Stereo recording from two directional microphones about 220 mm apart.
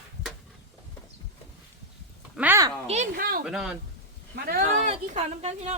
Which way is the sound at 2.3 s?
10° right (ahead or behind).